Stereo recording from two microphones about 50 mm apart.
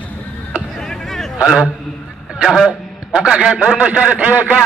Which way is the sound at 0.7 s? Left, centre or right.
Centre.